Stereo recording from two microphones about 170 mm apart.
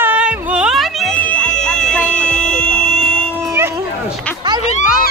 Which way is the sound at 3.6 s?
15° right (ahead or behind).